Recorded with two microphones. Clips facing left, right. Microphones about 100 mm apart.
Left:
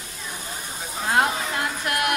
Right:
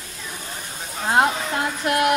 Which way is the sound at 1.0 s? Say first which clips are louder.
Right 3 dB; 25° right (ahead or behind).